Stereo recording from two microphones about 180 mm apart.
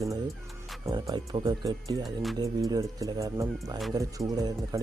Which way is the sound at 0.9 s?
20° right (ahead or behind).